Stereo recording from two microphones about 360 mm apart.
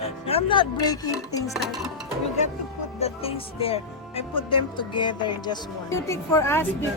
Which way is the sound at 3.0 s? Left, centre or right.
Centre.